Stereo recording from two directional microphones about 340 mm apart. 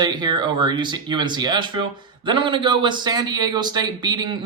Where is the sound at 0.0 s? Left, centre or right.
Centre.